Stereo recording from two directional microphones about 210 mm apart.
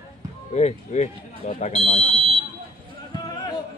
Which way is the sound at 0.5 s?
30° left (ahead or behind).